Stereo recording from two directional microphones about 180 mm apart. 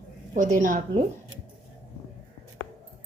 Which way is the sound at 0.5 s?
45° right (ahead or behind).